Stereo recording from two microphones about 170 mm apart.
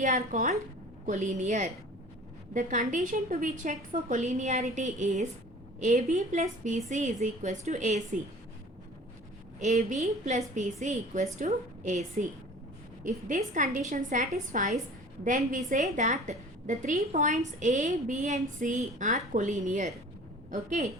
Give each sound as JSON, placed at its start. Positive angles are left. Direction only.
{"t": 0.0, "sound": "a woman's voice", "side_deg": -45}
{"t": 9.6, "sound": "a woman's voice", "side_deg": -45}